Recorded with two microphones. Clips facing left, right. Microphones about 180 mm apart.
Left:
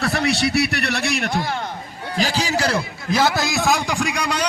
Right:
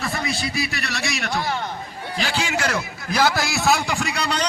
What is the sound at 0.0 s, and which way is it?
A man's voice, 75° left (ahead or behind).